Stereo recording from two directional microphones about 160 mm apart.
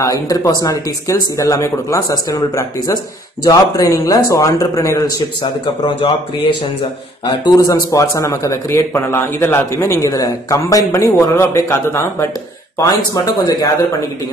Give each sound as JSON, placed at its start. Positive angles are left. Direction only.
{"t": 0.0, "sound": "a man's voice", "side_deg": 20}
{"t": 6.8, "sound": "a man's voice", "side_deg": 25}